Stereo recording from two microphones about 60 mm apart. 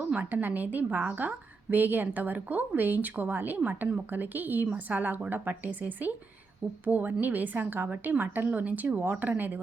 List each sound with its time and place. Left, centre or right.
0.2 s a woman's voice: right